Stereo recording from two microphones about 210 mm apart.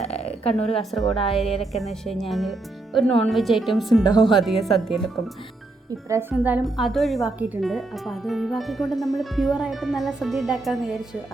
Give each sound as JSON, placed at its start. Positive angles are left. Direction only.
{"t": 0.0, "sound": "a sound", "side_deg": 30}
{"t": 0.8, "sound": "speech", "side_deg": 0}
{"t": 6.3, "sound": "speech", "side_deg": -5}